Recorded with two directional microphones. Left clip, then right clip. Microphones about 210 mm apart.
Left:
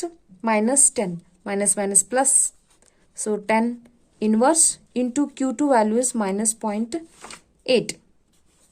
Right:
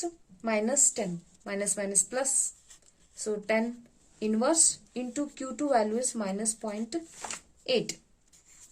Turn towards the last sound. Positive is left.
turn(degrees=50)  # may be behind; listen again after turning